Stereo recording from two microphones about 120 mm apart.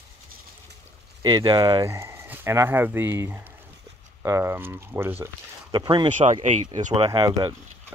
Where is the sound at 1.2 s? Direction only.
35° right (ahead or behind).